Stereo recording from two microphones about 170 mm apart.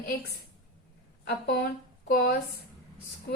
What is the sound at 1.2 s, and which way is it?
A woman's voice, 70° left (ahead or behind).